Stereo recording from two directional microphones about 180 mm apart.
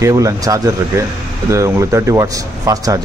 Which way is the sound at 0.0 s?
20° right (ahead or behind).